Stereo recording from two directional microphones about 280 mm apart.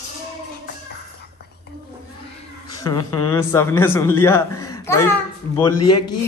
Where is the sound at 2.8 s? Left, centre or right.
Centre.